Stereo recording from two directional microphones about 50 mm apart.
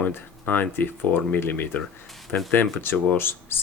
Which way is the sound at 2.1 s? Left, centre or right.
Centre.